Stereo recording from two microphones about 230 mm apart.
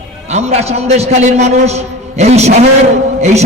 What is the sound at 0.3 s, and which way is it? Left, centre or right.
A man's voice, right.